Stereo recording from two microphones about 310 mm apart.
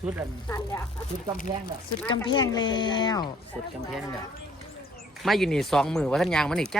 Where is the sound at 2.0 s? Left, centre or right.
Centre.